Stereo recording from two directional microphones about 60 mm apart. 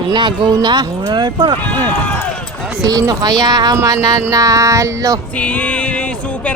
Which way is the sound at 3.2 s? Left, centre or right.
Right.